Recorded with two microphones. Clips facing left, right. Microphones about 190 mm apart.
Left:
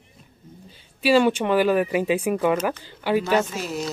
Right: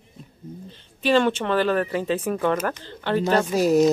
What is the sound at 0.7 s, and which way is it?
Speech, 10° left (ahead or behind).